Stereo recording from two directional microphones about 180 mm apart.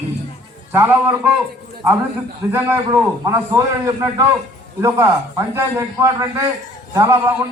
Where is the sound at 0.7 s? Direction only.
10° right (ahead or behind).